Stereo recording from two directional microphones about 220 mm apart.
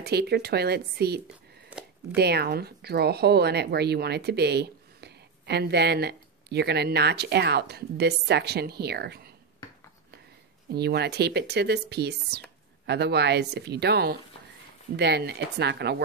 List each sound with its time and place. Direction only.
0.0 s speech: 45° right (ahead or behind)
1.3 s a sound: 5° right (ahead or behind)
2.1 s speech: 45° right (ahead or behind)
10.7 s speech: 45° right (ahead or behind)